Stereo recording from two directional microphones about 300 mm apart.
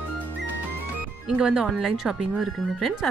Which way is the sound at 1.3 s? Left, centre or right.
Centre.